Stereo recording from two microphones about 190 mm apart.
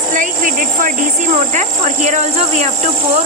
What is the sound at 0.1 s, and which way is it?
Speech, 45° right (ahead or behind).